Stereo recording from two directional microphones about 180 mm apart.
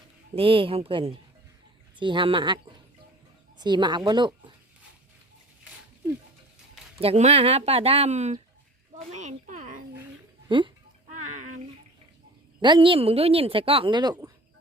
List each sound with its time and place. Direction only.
0.3 s a woman's voice: 30° right (ahead or behind)
3.6 s a woman's voice: 25° right (ahead or behind)
7.0 s a woman's voice: 35° right (ahead or behind)
9.0 s a sound: 40° right (ahead or behind)
10.5 s a woman's voice: 25° right (ahead or behind)
11.1 s bathtub: 45° right (ahead or behind)
12.6 s a woman's voice: 25° right (ahead or behind)